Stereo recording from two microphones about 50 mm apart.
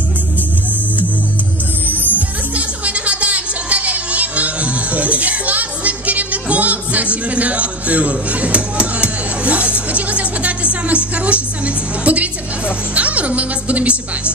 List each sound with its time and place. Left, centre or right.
2.1 s music: right
12.9 s speech: right